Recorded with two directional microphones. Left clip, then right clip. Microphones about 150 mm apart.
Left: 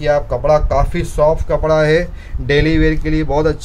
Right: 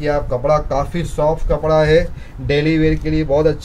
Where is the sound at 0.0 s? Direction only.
70° left (ahead or behind).